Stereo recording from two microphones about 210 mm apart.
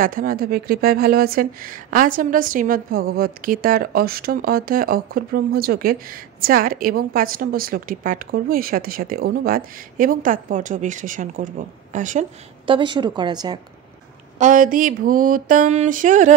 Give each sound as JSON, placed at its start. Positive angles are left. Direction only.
{"t": 0.0, "sound": "speech", "side_deg": -40}
{"t": 12.6, "sound": "a woman's voice", "side_deg": -25}
{"t": 14.4, "sound": "speech", "side_deg": -40}